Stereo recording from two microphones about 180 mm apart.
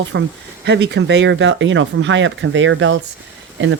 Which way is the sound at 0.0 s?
85° right.